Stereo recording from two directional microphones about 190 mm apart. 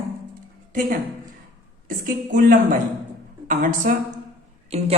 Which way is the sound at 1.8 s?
45° right (ahead or behind).